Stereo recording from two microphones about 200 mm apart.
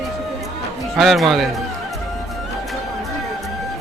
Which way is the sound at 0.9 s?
Centre (ahead or behind).